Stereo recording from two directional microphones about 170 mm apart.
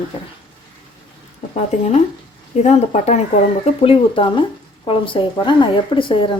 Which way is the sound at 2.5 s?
40° left (ahead or behind).